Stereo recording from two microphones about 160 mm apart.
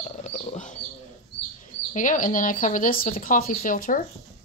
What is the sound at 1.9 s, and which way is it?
Speech, 55° left (ahead or behind).